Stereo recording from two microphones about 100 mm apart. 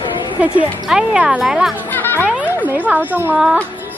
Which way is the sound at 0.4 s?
15° right (ahead or behind).